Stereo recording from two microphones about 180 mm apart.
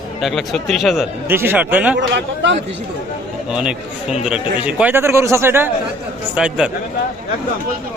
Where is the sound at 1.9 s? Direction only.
80° right.